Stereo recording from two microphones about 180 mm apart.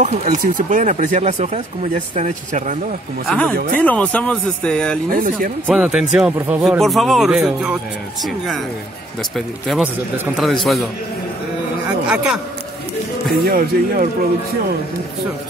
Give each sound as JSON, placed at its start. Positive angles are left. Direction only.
{"t": 0.0, "sound": "speech", "side_deg": -40}
{"t": 3.3, "sound": "speech", "side_deg": 5}
{"t": 5.1, "sound": "speech", "side_deg": -50}
{"t": 5.7, "sound": "speech", "side_deg": -5}
{"t": 9.7, "sound": "speech", "side_deg": 0}
{"t": 12.1, "sound": "speech", "side_deg": -5}
{"t": 13.5, "sound": "speech", "side_deg": -50}